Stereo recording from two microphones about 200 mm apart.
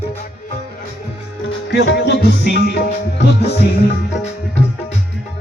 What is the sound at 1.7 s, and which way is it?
Music, 55° left (ahead or behind).